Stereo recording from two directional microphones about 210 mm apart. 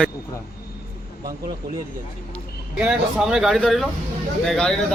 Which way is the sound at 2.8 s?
5° right (ahead or behind).